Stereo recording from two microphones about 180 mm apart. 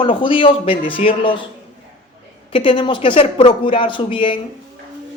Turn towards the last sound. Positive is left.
turn(degrees=30)  # may be behind; listen again after turning